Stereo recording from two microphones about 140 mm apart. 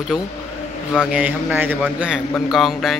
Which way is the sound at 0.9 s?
5° right (ahead or behind).